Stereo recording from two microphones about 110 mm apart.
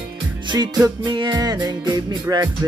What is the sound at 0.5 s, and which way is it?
Music, 35° right (ahead or behind).